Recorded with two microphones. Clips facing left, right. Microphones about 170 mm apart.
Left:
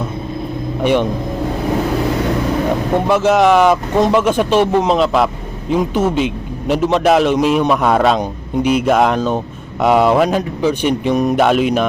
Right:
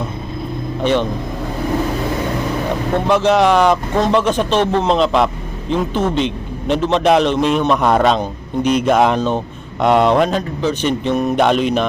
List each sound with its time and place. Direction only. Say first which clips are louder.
0.8 s speech: left 2 dB; 10° left (ahead or behind)
3.1 s speech: left 1 dB; 5° left (ahead or behind)